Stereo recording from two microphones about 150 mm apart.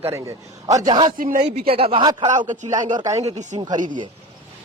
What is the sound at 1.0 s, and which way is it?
Speech, 65° right (ahead or behind).